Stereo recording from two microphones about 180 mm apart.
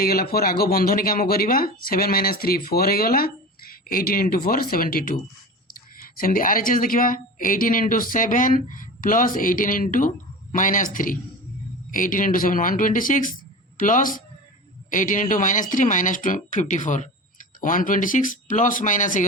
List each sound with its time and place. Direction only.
0.0 s a woman's voice: 55° left (ahead or behind)